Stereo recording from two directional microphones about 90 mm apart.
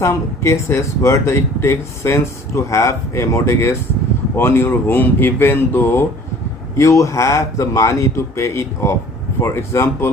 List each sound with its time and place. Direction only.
0.0 s speech: 30° left (ahead or behind)
6.7 s speech: 35° left (ahead or behind)